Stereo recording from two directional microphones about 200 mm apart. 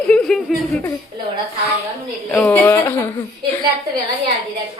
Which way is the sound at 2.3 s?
10° left (ahead or behind).